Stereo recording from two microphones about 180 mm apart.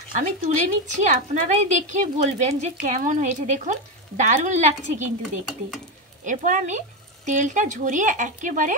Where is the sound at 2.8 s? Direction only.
45° right (ahead or behind).